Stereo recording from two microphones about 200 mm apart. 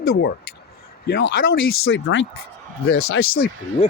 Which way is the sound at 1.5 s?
60° left (ahead or behind).